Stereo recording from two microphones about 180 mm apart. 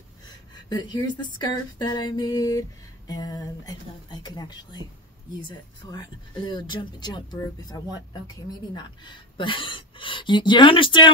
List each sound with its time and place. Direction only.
0.7 s speech: 25° left (ahead or behind)